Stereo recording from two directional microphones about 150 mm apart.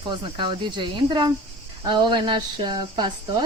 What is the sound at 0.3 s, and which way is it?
Speech, 30° right (ahead or behind).